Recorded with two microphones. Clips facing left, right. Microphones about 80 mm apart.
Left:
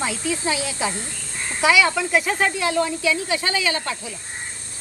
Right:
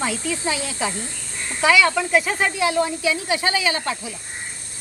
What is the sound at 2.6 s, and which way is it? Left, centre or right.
Speech, right.